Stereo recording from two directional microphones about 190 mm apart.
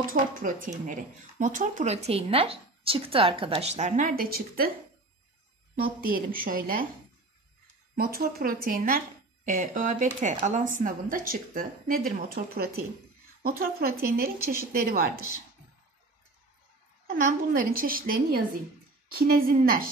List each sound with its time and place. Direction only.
0.0 s speech: 45° right (ahead or behind)
5.8 s speech: 50° right (ahead or behind)
7.9 s speech: 50° right (ahead or behind)
17.1 s speech: 45° right (ahead or behind)